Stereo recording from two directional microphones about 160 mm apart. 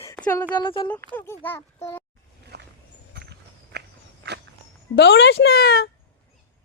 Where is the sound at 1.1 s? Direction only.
15° left (ahead or behind).